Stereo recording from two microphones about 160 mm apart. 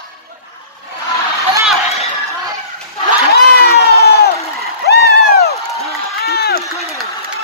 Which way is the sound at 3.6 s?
85° left.